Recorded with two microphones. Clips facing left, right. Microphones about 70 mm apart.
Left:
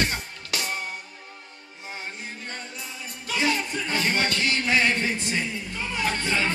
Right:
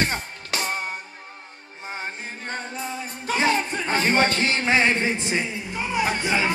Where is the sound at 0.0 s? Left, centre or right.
Right.